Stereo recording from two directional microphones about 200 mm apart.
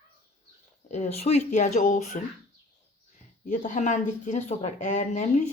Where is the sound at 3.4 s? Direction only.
40° left (ahead or behind).